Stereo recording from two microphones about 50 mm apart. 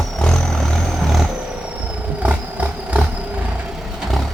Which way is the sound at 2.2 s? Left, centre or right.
Right.